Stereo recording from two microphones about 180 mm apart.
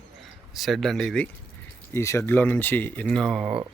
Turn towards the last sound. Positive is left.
turn(degrees=-5)  # may be behind; listen again after turning